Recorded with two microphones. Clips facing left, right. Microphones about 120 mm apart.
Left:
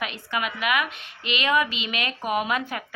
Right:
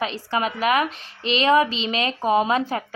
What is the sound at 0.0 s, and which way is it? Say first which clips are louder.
A woman's voice: right 5 dB; 35° right (ahead or behind).